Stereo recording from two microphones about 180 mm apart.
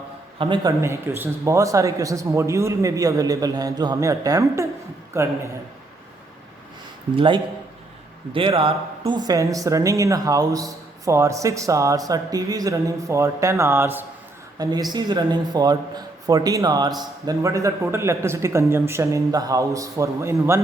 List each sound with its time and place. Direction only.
0.3 s a man's voice: 30° right (ahead or behind)
0.8 s a man's voice: 15° right (ahead or behind)
7.2 s a man's voice: 25° right (ahead or behind)